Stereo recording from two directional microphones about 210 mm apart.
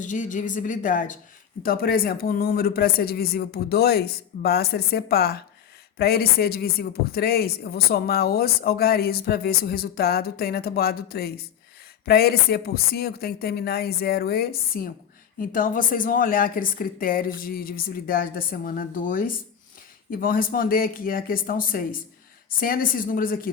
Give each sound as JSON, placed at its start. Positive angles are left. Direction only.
{"t": 0.0, "sound": "a woman's voice", "side_deg": 35}